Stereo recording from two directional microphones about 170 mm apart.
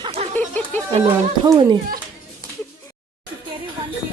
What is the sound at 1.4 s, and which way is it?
Speech, 25° right (ahead or behind).